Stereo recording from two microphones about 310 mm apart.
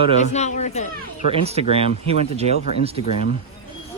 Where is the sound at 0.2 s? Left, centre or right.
Left.